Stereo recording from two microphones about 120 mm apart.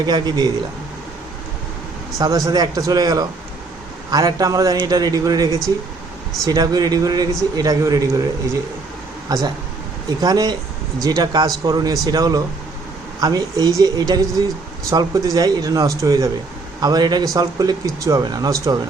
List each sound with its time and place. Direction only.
0.0 s a man's voice: 35° right (ahead or behind)
2.1 s a man's voice: 30° right (ahead or behind)
9.3 s a man's voice: 35° right (ahead or behind)